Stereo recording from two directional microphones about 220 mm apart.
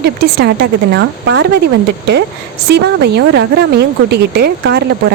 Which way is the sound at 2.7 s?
50° right (ahead or behind).